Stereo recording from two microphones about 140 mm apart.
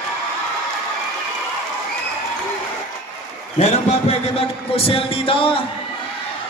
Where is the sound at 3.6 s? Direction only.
50° left (ahead or behind).